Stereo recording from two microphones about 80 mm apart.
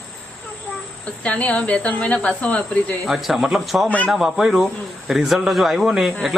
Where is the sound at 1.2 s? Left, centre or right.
Centre.